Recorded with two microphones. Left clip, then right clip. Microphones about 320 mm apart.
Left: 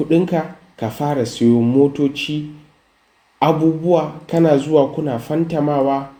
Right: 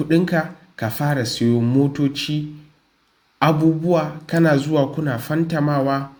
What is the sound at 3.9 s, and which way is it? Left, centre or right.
Speech, right.